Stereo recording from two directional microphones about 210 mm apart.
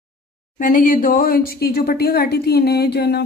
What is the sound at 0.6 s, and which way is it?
Speech, 40° left (ahead or behind).